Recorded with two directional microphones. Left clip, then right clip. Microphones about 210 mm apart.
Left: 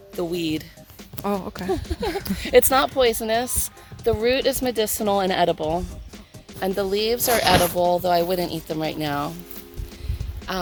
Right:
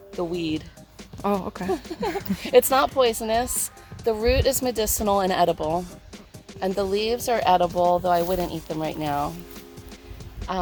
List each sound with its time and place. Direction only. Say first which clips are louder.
0.2 s speech: left 2 dB; 45° left (ahead or behind)
1.2 s speech: right 1 dB; centre (ahead or behind)
1.7 s speech: left 2 dB; 45° left (ahead or behind)
2.1 s speech: left 1 dB; centre (ahead or behind)
2.4 s speech: left 1 dB; 40° left (ahead or behind)
10.5 s speech: even; 50° left (ahead or behind)